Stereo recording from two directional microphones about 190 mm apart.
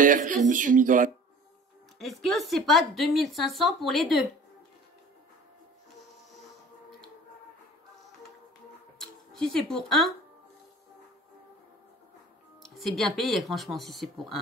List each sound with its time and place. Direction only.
0.0 s speech: 45° right (ahead or behind)
2.0 s speech: centre (ahead or behind)
9.0 s speech: centre (ahead or behind)
12.6 s speech: centre (ahead or behind)